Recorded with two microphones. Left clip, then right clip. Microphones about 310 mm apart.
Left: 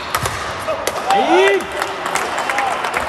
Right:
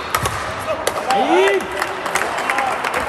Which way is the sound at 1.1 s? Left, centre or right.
Left.